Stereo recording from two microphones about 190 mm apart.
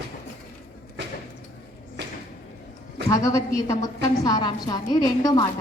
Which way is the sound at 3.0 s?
15° left (ahead or behind).